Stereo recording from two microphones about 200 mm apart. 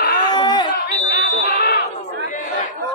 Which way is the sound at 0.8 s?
55° left (ahead or behind).